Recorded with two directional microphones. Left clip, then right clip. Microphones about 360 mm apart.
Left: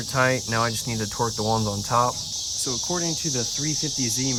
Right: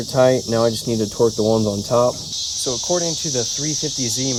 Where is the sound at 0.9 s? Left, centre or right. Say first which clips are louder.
Right 8 dB; left.